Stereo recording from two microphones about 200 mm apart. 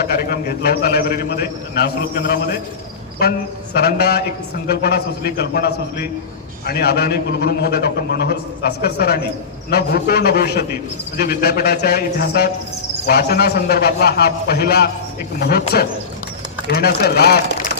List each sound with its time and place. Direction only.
0.0 s a man's voice: 50° left (ahead or behind)
16.7 s a man's voice: 50° left (ahead or behind)